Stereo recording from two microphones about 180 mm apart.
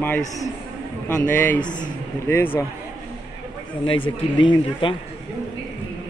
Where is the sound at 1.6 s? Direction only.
45° left (ahead or behind).